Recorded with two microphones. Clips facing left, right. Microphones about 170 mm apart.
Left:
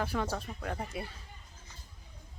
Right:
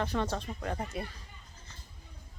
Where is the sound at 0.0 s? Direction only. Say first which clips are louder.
Right 1 dB; 10° left (ahead or behind).